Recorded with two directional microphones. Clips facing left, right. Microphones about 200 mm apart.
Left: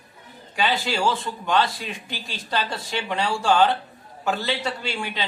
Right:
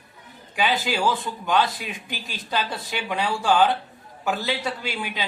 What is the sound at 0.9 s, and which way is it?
A man's voice, 5° right (ahead or behind).